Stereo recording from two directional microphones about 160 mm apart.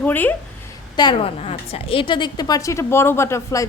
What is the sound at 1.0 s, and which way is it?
A woman's voice, 30° left (ahead or behind).